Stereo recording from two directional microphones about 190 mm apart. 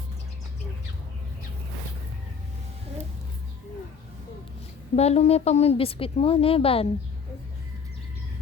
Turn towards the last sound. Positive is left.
turn(degrees=30)  # may be behind; listen again after turning